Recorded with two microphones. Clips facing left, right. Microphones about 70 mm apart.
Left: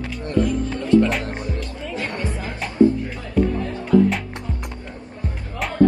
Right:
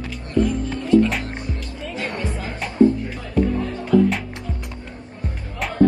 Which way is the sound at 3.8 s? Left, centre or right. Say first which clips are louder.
Left 1 dB; centre.